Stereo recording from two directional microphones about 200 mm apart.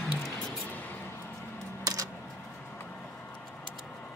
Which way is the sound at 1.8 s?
15° right (ahead or behind).